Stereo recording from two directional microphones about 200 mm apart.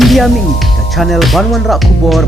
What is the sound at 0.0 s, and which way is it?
Music, centre (ahead or behind).